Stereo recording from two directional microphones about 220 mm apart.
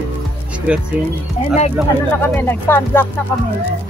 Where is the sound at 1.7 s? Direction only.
10° left (ahead or behind).